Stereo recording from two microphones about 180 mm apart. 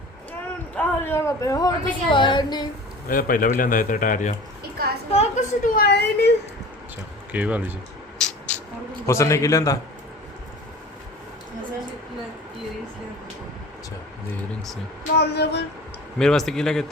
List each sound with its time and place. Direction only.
0.8 s a woman's voice: 15° left (ahead or behind)
3.1 s a woman's voice: 50° left (ahead or behind); by 6.3 s 70° left (ahead or behind)
7.3 s speech: 10° right (ahead or behind)
8.2 s music: 5° left (ahead or behind)
9.0 s a man's voice: 15° left (ahead or behind)
15.1 s speech: 65° left (ahead or behind)
16.1 s a man's voice: 5° left (ahead or behind)